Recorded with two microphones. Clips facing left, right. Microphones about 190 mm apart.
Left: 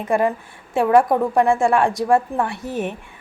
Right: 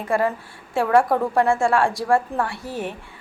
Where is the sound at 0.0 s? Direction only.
20° left (ahead or behind).